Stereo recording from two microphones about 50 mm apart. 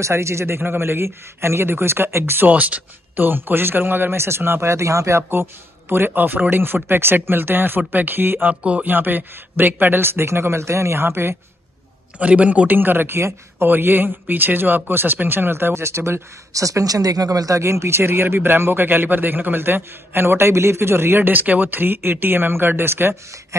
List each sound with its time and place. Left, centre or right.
0.0 s speech: right
2.3 s speech: right
3.2 s a man's voice: right
4.6 s speech: right
5.3 s a man's voice: right
8.5 s speech: right
8.9 s a man's voice: right
12.2 s a man's voice: right
17.6 s a man's voice: right
21.3 s a man's voice: right